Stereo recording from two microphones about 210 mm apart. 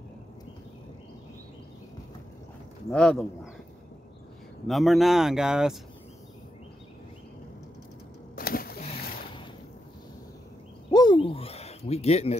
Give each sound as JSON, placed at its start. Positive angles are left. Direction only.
{"t": 2.9, "sound": "speech", "side_deg": 5}
{"t": 4.6, "sound": "speech", "side_deg": 0}
{"t": 8.4, "sound": "a sound", "side_deg": 45}
{"t": 10.9, "sound": "owl", "side_deg": 20}